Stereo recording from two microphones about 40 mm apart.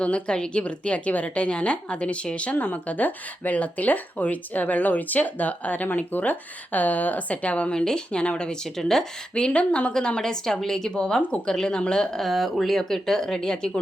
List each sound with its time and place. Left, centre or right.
0.0 s speech: left
0.6 s speech: left
2.8 s speech: left
8.6 s speech: centre
9.3 s speech: left
10.2 s speech: centre
10.9 s speech: left
12.1 s speech: centre